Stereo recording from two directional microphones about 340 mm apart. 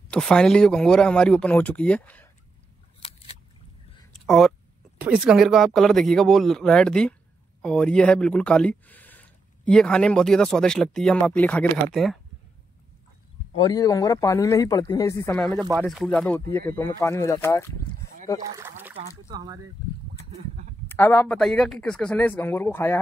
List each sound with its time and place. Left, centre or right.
0.1 s speech: centre
3.0 s a sound: centre
4.1 s a sound: centre
5.0 s speech: centre
13.6 s speech: centre
18.4 s speech: centre
20.9 s speech: centre